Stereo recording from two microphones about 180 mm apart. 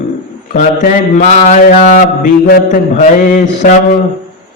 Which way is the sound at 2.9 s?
45° left (ahead or behind).